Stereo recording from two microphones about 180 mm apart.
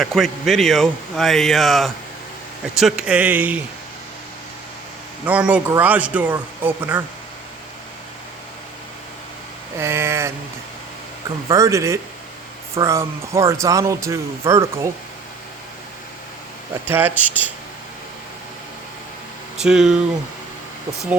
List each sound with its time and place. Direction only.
0.0 s speech: centre (ahead or behind)
5.2 s speech: 10° right (ahead or behind)
9.7 s speech: 15° right (ahead or behind)
11.4 s speech: 15° right (ahead or behind)
16.8 s speech: 10° right (ahead or behind)
19.6 s speech: centre (ahead or behind)